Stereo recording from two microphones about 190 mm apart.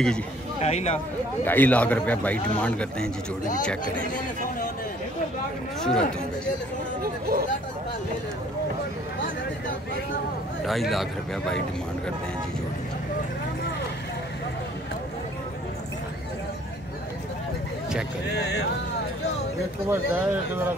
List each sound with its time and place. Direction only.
0.6 s speech: 35° left (ahead or behind)
1.4 s a man's voice: 10° left (ahead or behind)
5.8 s speech: 5° left (ahead or behind)
7.0 s chatter: 50° right (ahead or behind)
10.7 s speech: centre (ahead or behind)
18.4 s speech: 65° left (ahead or behind)
19.9 s speech: 10° right (ahead or behind)